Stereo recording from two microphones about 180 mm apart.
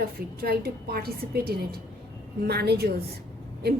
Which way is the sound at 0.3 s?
60° right (ahead or behind).